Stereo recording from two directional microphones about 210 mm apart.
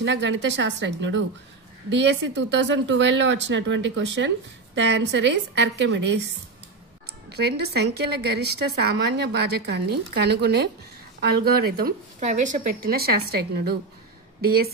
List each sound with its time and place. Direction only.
0.0 s speech: 55° right (ahead or behind)
7.2 s a woman's voice: 50° right (ahead or behind)
12.2 s a woman's voice: 35° right (ahead or behind)